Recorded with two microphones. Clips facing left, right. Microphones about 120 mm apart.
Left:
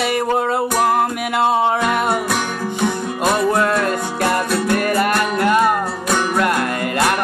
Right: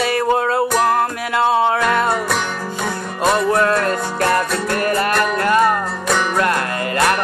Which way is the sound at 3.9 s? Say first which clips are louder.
Right 1 dB; 10° left (ahead or behind).